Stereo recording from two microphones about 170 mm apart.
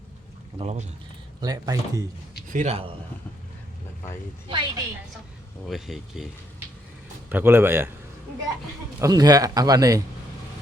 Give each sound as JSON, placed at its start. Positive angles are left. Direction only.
{"t": 0.6, "sound": "a man's voice", "side_deg": -40}
{"t": 1.4, "sound": "a man's voice", "side_deg": -20}
{"t": 2.5, "sound": "a man's voice", "side_deg": -45}
{"t": 4.4, "sound": "a man's voice", "side_deg": -30}
{"t": 5.6, "sound": "speech", "side_deg": 0}
{"t": 7.3, "sound": "speech", "side_deg": -10}
{"t": 9.0, "sound": "a man's voice", "side_deg": -20}